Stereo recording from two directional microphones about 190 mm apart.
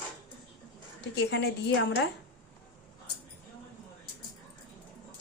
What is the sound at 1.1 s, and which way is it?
Speech, 60° left (ahead or behind).